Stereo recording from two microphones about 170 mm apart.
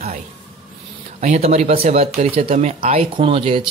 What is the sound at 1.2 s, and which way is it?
Speech, 40° right (ahead or behind).